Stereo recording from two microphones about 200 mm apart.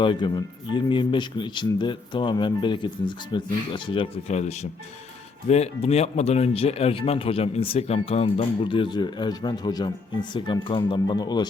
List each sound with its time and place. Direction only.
0.0 s speech: 25° left (ahead or behind)